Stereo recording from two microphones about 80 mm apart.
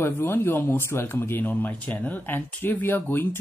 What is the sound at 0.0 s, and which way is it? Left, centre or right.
Speech, left.